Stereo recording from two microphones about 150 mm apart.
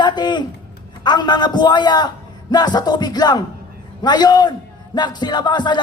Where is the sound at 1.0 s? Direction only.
30° left (ahead or behind).